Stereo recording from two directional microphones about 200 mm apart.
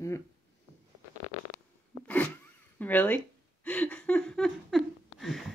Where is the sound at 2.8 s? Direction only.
10° left (ahead or behind).